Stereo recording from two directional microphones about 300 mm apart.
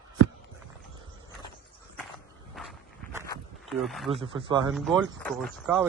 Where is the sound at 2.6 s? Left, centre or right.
Centre.